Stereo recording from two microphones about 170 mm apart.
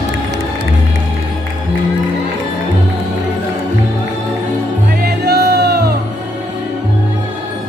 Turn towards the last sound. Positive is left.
turn(degrees=-75)  # may be behind; listen again after turning